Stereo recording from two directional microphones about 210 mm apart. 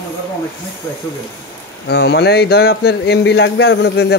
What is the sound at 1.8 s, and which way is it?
Speech, 50° left (ahead or behind).